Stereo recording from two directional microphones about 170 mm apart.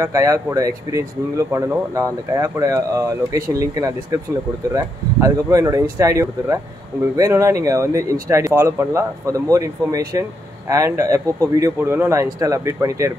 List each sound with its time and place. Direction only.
0.0 s speech: 20° right (ahead or behind)